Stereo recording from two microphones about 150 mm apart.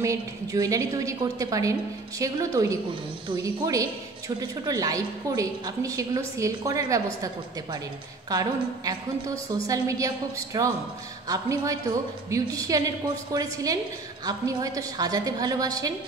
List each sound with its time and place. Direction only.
0.0 s a woman's voice: 20° right (ahead or behind)
8.3 s a woman's voice: 25° right (ahead or behind)